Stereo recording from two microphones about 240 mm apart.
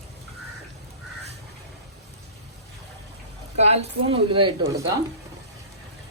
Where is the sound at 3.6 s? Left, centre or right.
Right.